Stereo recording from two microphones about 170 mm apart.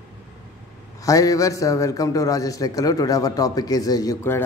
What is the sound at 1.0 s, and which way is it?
A man's voice, 20° left (ahead or behind).